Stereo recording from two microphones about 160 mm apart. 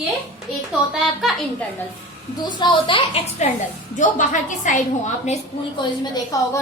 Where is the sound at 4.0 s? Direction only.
50° left (ahead or behind).